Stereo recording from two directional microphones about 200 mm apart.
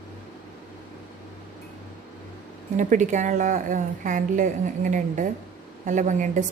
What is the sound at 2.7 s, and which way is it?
A woman's voice, 40° right (ahead or behind).